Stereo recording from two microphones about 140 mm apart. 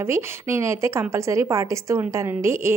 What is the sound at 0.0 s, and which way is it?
A woman's voice, 20° right (ahead or behind).